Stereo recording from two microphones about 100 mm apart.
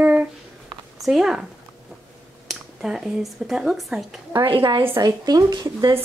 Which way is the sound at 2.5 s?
5° right (ahead or behind).